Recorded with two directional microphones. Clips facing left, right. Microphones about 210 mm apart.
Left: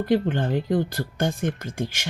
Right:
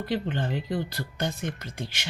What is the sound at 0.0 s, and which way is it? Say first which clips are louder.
Speech: left 7 dB; 50° left (ahead or behind).